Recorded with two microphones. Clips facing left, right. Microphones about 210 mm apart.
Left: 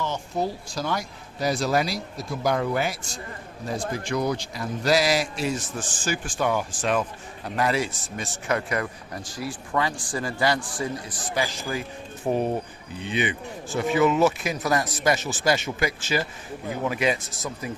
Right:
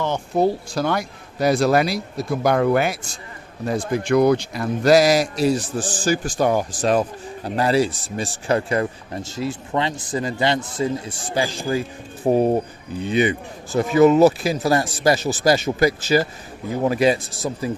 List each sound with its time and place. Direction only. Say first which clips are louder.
0.0 s speech: right 8 dB; 60° right (ahead or behind); by 17.7 s 35° right (ahead or behind)